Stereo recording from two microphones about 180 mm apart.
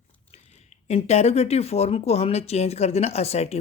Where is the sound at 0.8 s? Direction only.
35° left (ahead or behind).